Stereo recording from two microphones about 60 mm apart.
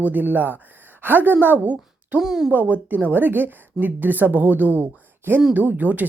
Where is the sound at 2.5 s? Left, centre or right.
Right.